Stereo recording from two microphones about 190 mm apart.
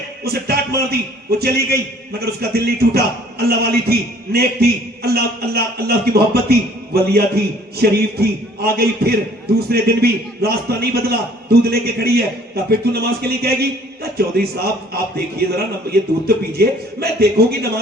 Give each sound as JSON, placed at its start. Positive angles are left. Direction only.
{"t": 0.3, "sound": "a man's voice", "side_deg": -55}